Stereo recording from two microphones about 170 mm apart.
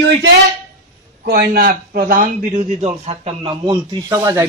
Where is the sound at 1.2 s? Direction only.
70° right (ahead or behind).